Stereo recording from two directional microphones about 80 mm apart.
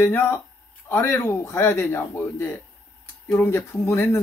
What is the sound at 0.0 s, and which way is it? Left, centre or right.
A man's voice, left.